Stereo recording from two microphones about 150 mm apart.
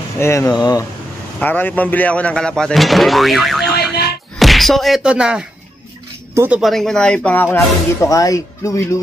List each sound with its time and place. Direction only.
0.2 s speech: 20° left (ahead or behind)
1.4 s speech: 10° left (ahead or behind); by 6.6 s 15° right (ahead or behind)
6.6 s speech: centre (ahead or behind)
7.5 s speech: 20° left (ahead or behind)